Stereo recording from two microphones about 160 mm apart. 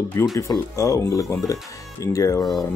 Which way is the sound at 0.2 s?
20° left (ahead or behind).